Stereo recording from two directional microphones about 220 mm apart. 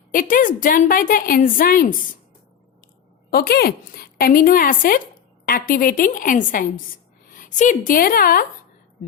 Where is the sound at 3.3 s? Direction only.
45° left (ahead or behind).